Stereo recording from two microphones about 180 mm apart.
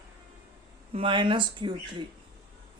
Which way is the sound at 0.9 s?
30° right (ahead or behind).